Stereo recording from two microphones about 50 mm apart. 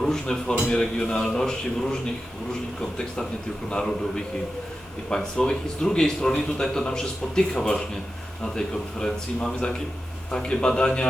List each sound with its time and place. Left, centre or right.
0.0 s a man's voice: centre
3.7 s a man's voice: centre